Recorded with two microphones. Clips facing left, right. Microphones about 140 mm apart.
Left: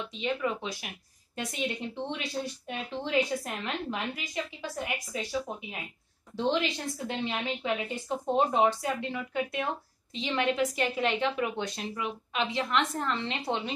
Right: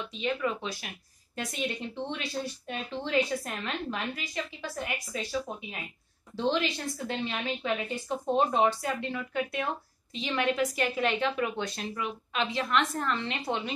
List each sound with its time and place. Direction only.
0.1 s a woman's voice: 20° left (ahead or behind)